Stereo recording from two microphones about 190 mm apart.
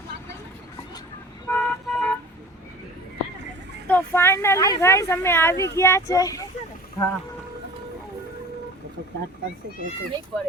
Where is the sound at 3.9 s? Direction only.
10° left (ahead or behind).